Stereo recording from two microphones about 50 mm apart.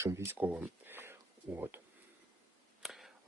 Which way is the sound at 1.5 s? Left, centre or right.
Right.